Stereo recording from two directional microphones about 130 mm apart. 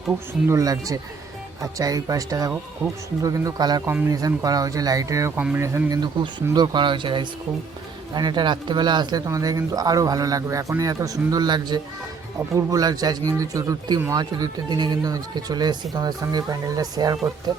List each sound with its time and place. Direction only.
0.4 s speech: 25° right (ahead or behind)
2.8 s speech: 10° right (ahead or behind)
3.2 s speech: 25° right (ahead or behind)
6.0 s speech: 35° right (ahead or behind)